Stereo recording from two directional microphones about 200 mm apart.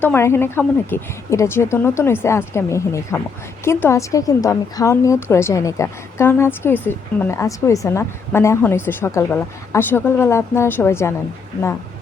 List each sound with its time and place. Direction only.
0.0 s a woman's voice: 10° left (ahead or behind)